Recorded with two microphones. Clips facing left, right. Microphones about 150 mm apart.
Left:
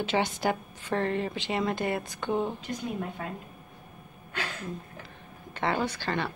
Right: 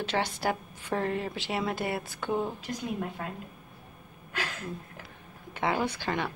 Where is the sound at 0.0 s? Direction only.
Centre (ahead or behind).